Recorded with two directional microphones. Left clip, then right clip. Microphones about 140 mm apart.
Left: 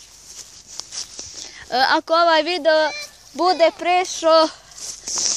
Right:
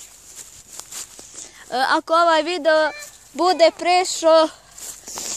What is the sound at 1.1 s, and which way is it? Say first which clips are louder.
Speech: left 5 dB; centre (ahead or behind).